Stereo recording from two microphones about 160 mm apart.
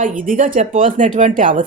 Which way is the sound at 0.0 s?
55° right (ahead or behind).